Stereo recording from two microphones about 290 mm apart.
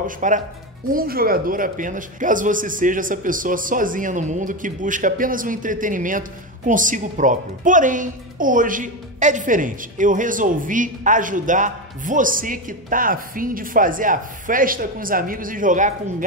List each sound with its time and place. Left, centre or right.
0.0 s a man's voice: right